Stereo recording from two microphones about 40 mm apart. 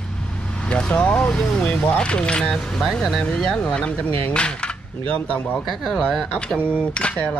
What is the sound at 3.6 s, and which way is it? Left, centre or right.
Speech, left.